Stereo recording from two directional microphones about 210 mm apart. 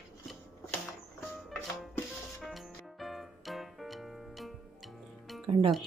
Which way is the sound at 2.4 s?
Centre (ahead or behind).